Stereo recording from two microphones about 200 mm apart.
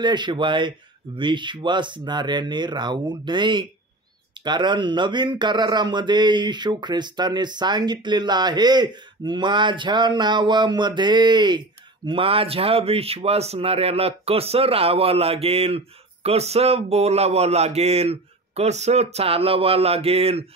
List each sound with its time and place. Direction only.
0.0 s speech: 20° right (ahead or behind)